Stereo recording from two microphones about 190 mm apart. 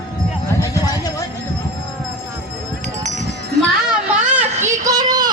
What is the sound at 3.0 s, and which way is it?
Music, 40° right (ahead or behind).